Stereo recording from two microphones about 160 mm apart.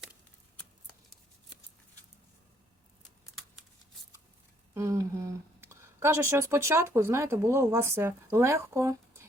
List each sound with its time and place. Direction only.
4.7 s speech: 20° right (ahead or behind)